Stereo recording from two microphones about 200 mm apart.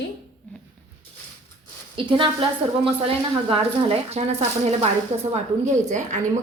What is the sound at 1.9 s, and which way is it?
A woman's voice, 25° right (ahead or behind).